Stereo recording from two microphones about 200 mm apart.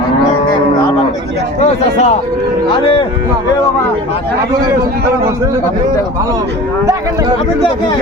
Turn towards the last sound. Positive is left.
turn(degrees=-15)  # may be behind; listen again after turning